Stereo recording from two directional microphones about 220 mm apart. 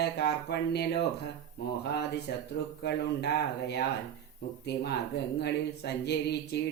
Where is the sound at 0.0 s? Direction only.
45° left (ahead or behind).